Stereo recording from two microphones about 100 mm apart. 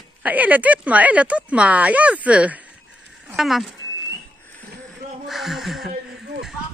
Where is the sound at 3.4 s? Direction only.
Centre (ahead or behind).